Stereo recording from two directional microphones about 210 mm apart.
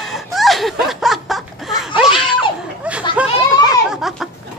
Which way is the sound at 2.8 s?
5° right (ahead or behind).